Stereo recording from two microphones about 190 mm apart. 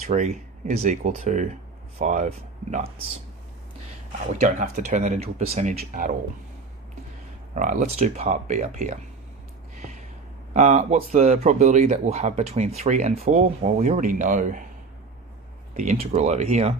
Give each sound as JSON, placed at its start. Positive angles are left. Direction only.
{"t": 0.0, "sound": "speech", "side_deg": -40}
{"t": 4.4, "sound": "speech", "side_deg": -40}
{"t": 7.5, "sound": "speech", "side_deg": -45}
{"t": 10.5, "sound": "speech", "side_deg": -40}
{"t": 15.7, "sound": "speech", "side_deg": -40}